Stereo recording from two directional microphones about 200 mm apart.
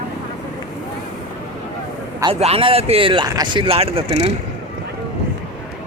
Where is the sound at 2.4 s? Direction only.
30° right (ahead or behind).